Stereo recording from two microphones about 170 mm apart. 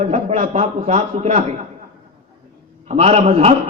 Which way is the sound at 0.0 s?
40° right (ahead or behind).